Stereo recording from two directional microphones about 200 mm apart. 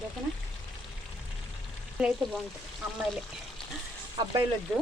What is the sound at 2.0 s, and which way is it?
Speech, 5° right (ahead or behind).